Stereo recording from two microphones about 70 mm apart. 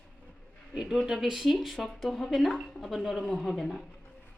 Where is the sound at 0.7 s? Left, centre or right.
Centre.